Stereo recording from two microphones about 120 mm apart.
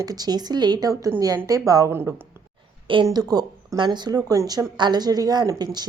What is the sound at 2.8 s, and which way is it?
A woman's voice, 40° right (ahead or behind).